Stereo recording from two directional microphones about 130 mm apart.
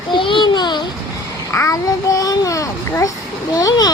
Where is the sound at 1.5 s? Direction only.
25° left (ahead or behind).